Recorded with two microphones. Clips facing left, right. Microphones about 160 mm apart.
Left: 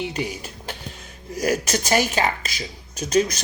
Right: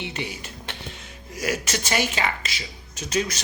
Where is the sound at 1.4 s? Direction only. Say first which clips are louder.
Left 5 dB; 40° left (ahead or behind).